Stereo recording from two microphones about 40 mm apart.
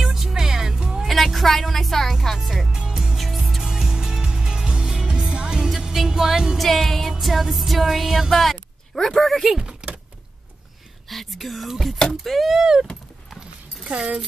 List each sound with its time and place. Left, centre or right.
0.0 s music: centre
1.0 s music: centre
2.1 s speech: centre
3.2 s music: centre
3.6 s music: centre
6.0 s music: centre
9.6 s typing: right
11.1 s music: centre
13.8 s speech: right